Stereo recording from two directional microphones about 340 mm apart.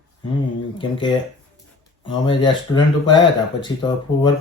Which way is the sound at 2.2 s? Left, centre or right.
Centre.